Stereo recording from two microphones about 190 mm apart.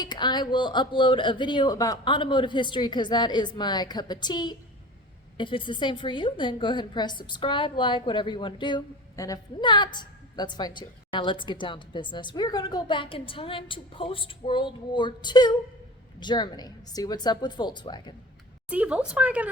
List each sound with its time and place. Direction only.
0.0 s a woman's voice: 25° left (ahead or behind)
18.7 s speech: 5° right (ahead or behind)